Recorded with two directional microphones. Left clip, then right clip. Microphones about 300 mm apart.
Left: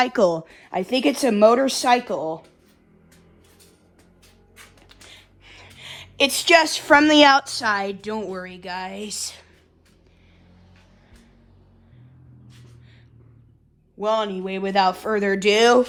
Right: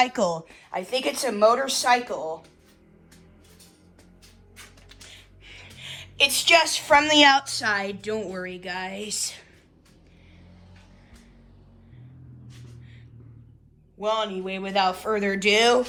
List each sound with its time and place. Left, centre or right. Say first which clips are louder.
0.0 s speech: left 4 dB; left
5.0 s a woman's voice: left 1 dB; centre
14.0 s speech: left 3 dB; centre